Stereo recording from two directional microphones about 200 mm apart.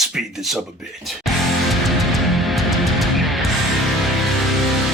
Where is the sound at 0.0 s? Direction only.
Centre (ahead or behind).